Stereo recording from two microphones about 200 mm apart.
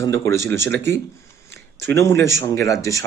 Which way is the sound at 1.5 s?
60° right (ahead or behind).